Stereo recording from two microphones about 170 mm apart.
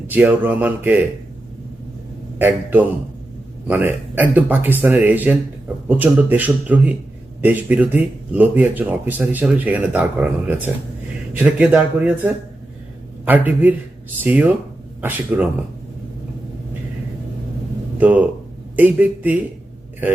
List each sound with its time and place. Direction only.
0.1 s speech: 10° right (ahead or behind)
2.4 s speech: 10° right (ahead or behind)
17.9 s speech: 10° right (ahead or behind)